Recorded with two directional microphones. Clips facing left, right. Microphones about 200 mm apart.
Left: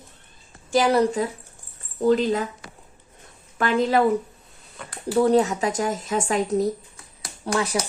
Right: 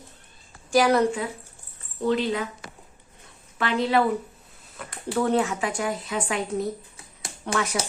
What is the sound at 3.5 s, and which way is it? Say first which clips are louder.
Speech: left 3 dB; 45° left (ahead or behind).